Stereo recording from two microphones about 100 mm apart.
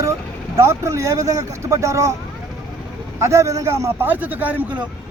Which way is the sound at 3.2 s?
30° right (ahead or behind).